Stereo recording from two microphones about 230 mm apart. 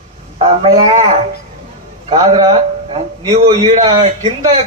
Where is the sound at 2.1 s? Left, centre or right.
Right.